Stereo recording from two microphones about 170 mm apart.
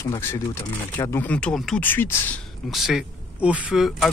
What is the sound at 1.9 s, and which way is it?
Speech, 15° left (ahead or behind).